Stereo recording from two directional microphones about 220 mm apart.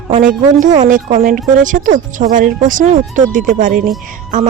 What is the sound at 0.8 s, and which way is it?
Speech, 35° right (ahead or behind).